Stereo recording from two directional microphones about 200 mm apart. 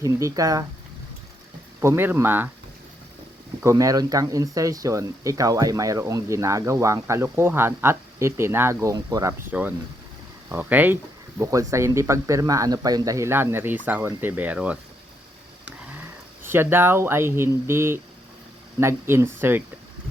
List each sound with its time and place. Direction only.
0.0 s speech: 15° right (ahead or behind)
1.8 s speech: 10° right (ahead or behind)
3.6 s speech: 15° right (ahead or behind)
16.5 s speech: 10° right (ahead or behind)